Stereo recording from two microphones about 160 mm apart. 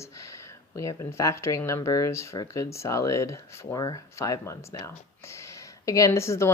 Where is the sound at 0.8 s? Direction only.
20° left (ahead or behind).